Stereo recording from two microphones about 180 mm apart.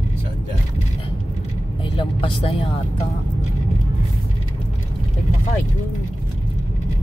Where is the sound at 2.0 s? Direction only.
30° left (ahead or behind).